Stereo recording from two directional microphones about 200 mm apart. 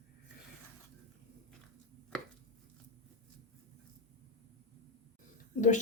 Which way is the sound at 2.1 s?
5° left (ahead or behind).